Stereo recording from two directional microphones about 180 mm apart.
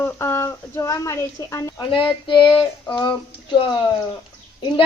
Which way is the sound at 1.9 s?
25° left (ahead or behind).